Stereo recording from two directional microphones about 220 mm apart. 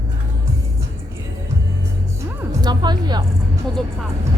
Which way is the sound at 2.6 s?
20° right (ahead or behind).